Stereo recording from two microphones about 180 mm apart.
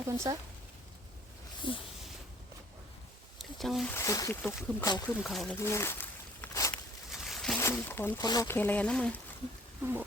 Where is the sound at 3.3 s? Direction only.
Centre (ahead or behind).